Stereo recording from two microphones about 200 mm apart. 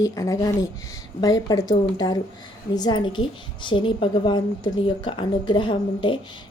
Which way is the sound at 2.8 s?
20° left (ahead or behind).